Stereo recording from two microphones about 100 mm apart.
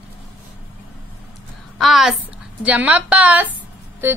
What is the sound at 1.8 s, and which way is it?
Speech, 5° right (ahead or behind).